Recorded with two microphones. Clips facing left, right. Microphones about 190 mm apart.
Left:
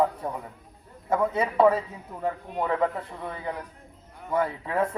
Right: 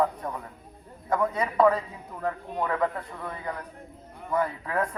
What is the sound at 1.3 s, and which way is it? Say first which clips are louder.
A man's voice: left 2 dB; 25° left (ahead or behind).